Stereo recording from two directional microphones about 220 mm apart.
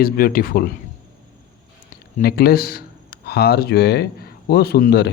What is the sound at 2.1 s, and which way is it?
A man's voice, 45° left (ahead or behind).